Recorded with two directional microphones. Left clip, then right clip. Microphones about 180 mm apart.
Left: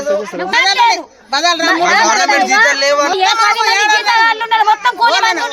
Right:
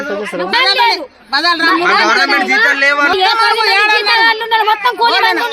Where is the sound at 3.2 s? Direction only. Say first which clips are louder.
Even; centre (ahead or behind).